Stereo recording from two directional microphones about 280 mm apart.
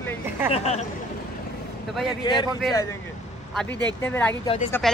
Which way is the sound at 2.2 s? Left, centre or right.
Centre.